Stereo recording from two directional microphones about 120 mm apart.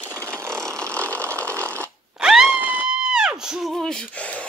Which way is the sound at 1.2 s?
20° right (ahead or behind).